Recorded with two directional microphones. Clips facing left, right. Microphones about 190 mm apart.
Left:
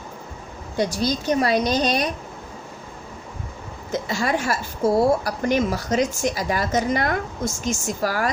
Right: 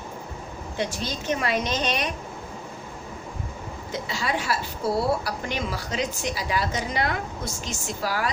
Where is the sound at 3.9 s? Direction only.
45° left (ahead or behind).